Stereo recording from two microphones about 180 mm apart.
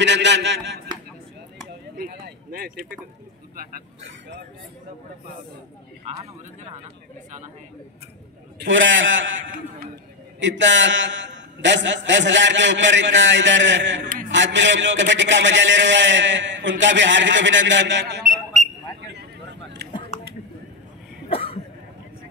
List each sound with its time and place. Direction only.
0.0 s a man's voice: 80° right
2.0 s speech: 55° right (ahead or behind)
8.5 s a man's voice: 90° right
10.4 s a man's voice: 90° right
18.9 s a sound: 70° right (ahead or behind)
19.9 s typing: 25° left (ahead or behind)
21.3 s cough: 30° left (ahead or behind)